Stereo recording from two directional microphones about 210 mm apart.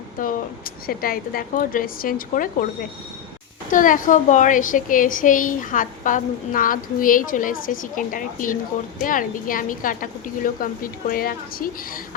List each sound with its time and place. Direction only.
0.2 s speech: 40° left (ahead or behind)
3.7 s a woman's voice: 40° left (ahead or behind)